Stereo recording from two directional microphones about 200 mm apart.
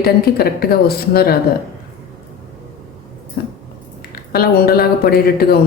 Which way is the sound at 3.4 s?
50° left (ahead or behind).